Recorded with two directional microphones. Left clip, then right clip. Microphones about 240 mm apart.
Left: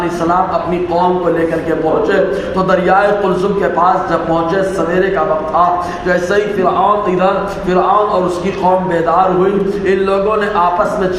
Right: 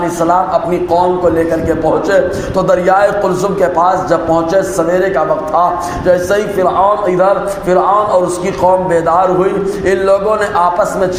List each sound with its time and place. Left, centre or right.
2.6 s a man's voice: right
6.1 s a man's voice: right